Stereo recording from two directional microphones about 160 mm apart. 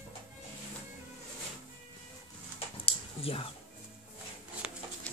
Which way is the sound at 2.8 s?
35° left (ahead or behind).